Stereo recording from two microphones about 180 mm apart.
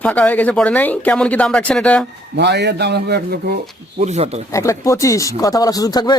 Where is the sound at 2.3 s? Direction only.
70° right (ahead or behind).